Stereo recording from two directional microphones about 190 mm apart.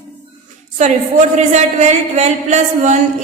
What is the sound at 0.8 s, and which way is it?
A man's voice, 40° right (ahead or behind).